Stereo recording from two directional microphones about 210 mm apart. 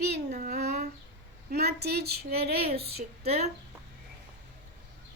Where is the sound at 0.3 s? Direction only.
35° right (ahead or behind).